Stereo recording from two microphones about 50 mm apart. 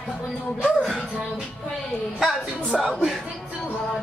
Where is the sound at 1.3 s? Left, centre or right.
Centre.